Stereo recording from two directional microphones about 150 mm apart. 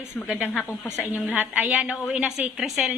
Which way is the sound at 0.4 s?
5° left (ahead or behind).